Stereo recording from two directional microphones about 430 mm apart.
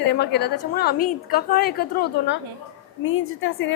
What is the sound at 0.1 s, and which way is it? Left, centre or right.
A woman's voice, left.